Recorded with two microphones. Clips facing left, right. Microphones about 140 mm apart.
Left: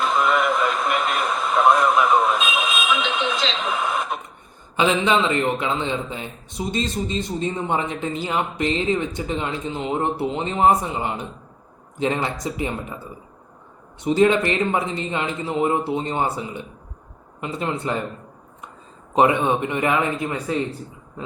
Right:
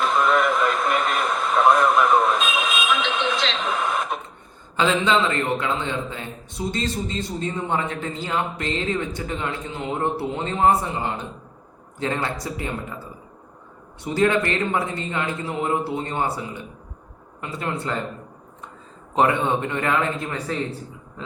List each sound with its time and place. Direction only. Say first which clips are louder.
0.0 s radio: even; centre (ahead or behind)
4.8 s a man's voice: left 1 dB; 15° left (ahead or behind)
14.0 s a man's voice: left 3 dB; 20° left (ahead or behind)
19.1 s a man's voice: left 2 dB; 15° left (ahead or behind)